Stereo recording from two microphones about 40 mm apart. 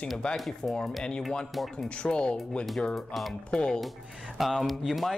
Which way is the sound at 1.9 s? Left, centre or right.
Left.